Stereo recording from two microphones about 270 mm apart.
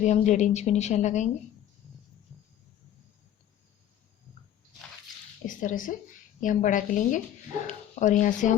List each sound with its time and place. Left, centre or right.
0.0 s speech: left
5.5 s speech: left